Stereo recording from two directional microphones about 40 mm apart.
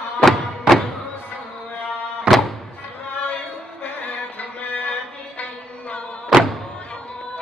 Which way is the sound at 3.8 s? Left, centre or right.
Left.